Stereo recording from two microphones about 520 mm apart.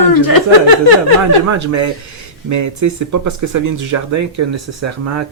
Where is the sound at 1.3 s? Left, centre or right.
Right.